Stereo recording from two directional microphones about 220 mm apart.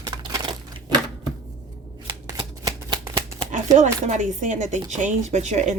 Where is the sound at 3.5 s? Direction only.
35° right (ahead or behind).